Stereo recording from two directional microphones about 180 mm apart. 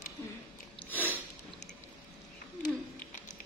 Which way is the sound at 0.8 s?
10° left (ahead or behind).